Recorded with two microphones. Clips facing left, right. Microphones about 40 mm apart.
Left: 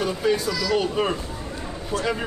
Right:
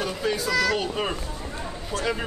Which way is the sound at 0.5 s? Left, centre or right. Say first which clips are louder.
Right 2 dB; right.